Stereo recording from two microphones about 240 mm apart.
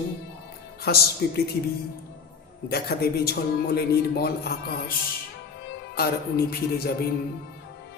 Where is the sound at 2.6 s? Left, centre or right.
Left.